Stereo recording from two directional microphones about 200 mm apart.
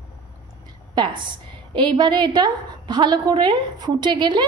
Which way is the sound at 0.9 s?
25° right (ahead or behind).